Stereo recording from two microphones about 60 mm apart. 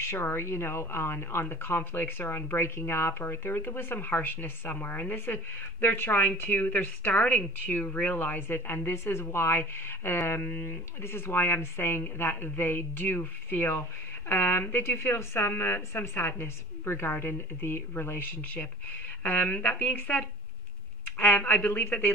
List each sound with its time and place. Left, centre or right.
0.0 s speech: left